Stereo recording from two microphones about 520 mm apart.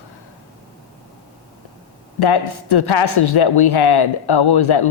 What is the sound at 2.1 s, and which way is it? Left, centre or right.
Speech, left.